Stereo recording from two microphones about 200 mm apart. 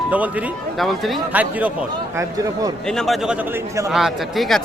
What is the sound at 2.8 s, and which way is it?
Speech, centre (ahead or behind).